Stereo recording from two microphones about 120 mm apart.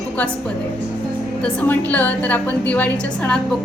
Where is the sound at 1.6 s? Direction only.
15° left (ahead or behind).